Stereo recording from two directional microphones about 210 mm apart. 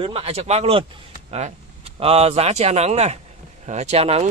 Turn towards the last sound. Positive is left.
turn(degrees=-30)  # may be behind; listen again after turning